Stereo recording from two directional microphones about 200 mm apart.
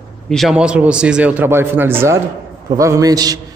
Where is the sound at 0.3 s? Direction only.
Centre (ahead or behind).